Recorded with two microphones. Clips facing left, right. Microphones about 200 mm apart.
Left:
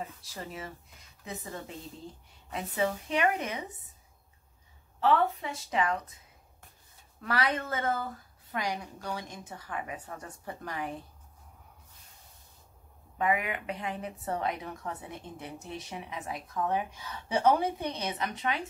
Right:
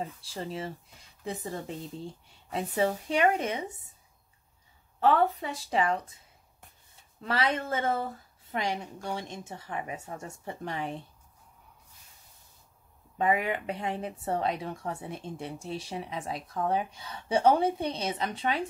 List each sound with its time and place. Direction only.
0.0 s a woman's voice: 30° right (ahead or behind)
5.0 s a woman's voice: 35° right (ahead or behind)
7.2 s a woman's voice: 25° right (ahead or behind)
13.2 s a woman's voice: 30° right (ahead or behind)